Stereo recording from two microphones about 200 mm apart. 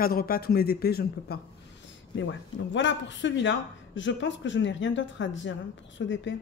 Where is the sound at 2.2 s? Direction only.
65° left (ahead or behind).